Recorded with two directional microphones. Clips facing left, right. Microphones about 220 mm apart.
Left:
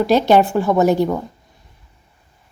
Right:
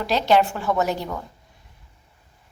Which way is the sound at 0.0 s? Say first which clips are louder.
Left 6 dB; 50° left (ahead or behind).